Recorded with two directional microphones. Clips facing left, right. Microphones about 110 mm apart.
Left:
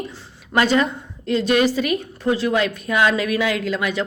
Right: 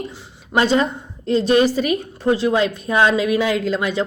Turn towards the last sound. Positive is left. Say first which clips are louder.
# right 3 dB
turn(degrees=-30)  # may be behind; listen again after turning